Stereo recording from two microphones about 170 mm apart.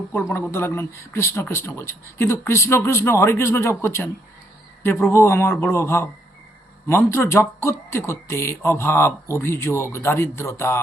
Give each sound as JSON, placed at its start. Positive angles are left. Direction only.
{"t": 0.1, "sound": "speech", "side_deg": 10}